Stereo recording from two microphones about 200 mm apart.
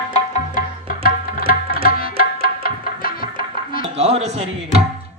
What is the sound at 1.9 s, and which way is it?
Music, 50° left (ahead or behind).